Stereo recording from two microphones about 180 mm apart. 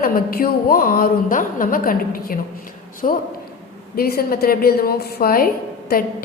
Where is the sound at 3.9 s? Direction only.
55° left (ahead or behind).